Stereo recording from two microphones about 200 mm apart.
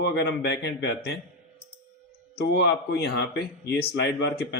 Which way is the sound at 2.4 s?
55° left (ahead or behind).